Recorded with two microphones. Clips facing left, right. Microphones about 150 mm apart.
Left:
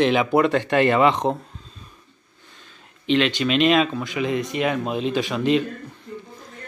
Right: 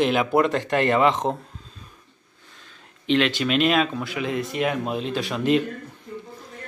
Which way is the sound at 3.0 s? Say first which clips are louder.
Left 1 dB; centre (ahead or behind).